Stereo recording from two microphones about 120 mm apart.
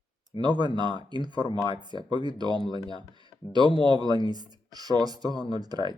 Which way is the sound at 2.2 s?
40° right (ahead or behind).